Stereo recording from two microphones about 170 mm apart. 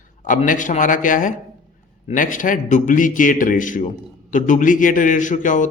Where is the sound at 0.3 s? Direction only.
50° left (ahead or behind).